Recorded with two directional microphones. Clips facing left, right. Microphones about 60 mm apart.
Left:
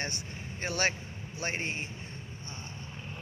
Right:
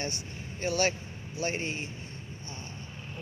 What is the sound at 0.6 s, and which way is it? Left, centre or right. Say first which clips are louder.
Speech: right 3 dB; left.